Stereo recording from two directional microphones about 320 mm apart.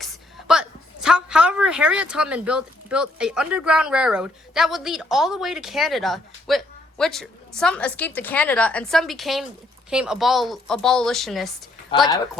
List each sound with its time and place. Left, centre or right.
0.0 s a woman's voice: centre
11.9 s speech: centre